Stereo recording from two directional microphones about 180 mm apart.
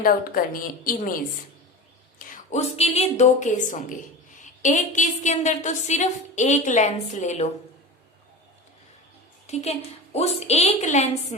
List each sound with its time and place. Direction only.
0.0 s a woman's voice: 55° left (ahead or behind)
2.3 s a woman's voice: 40° left (ahead or behind)
9.5 s a woman's voice: 35° left (ahead or behind)